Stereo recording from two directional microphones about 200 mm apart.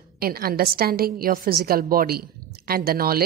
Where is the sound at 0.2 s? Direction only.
50° right (ahead or behind).